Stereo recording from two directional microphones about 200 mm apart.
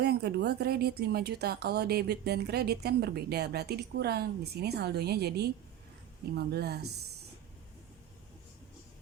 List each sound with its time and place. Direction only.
0.0 s speech: 55° right (ahead or behind)